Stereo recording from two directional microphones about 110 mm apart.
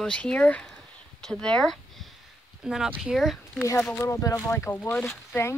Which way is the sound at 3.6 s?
25° left (ahead or behind).